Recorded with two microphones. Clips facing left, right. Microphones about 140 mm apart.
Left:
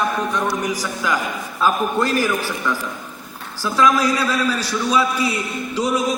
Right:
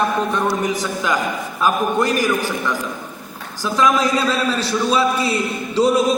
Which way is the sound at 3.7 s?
20° right (ahead or behind).